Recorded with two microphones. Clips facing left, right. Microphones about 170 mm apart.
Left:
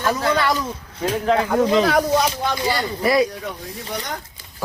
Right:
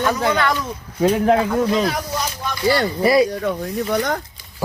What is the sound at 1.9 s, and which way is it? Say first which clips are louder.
Speech: left 7 dB; 70° left (ahead or behind).